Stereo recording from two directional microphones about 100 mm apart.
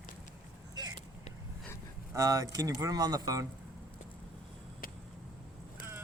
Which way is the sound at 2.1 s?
35° right (ahead or behind).